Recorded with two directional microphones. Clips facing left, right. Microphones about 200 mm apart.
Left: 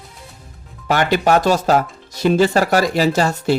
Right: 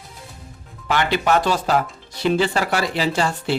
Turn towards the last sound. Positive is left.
turn(degrees=45)  # may be behind; listen again after turning